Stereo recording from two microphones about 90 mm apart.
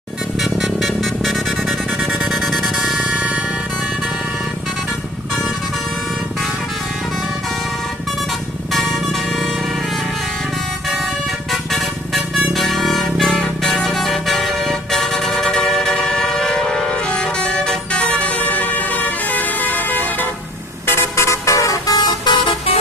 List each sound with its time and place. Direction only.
0.3 s music: centre (ahead or behind)
8.7 s vehicle: centre (ahead or behind)
11.5 s vehicle: centre (ahead or behind)
12.5 s music: centre (ahead or behind); by 20.2 s 20° left (ahead or behind)
20.8 s vehicle: 25° left (ahead or behind); by 22.4 s 50° left (ahead or behind)